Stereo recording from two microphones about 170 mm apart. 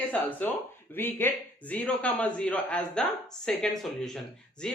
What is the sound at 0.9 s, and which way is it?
A man's voice, 15° left (ahead or behind).